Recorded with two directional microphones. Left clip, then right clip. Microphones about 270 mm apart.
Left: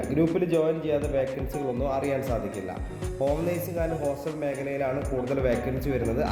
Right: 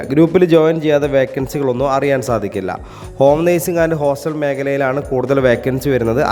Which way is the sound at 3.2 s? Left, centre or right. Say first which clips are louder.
Right 15 dB; right.